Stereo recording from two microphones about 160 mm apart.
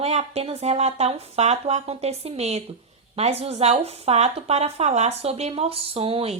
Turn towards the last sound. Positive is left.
turn(degrees=-35)  # may be behind; listen again after turning